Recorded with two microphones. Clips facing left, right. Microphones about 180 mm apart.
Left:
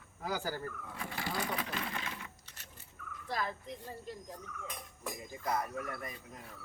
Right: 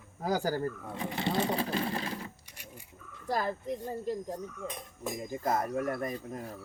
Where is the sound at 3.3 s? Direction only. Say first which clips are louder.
Right 7 dB; 40° right (ahead or behind).